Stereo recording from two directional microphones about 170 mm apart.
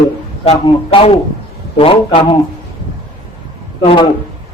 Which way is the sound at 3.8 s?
30° left (ahead or behind).